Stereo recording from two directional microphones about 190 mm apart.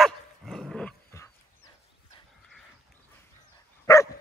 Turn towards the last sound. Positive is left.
turn(degrees=15)  # may be behind; listen again after turning